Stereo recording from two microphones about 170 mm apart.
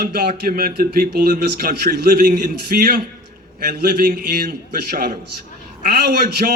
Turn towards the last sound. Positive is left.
turn(degrees=-60)  # may be behind; listen again after turning